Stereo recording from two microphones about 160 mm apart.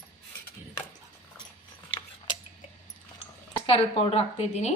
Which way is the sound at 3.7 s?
35° left (ahead or behind).